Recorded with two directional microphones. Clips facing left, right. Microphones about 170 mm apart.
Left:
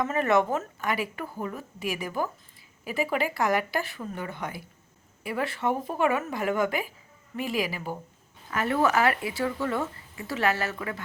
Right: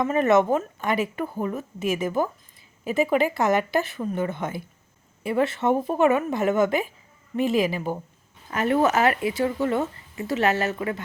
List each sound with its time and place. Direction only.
0.0 s speech: 20° right (ahead or behind)